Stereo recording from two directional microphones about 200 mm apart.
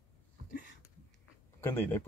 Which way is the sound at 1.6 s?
10° left (ahead or behind).